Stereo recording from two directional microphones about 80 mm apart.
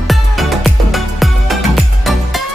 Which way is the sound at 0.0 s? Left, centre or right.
Centre.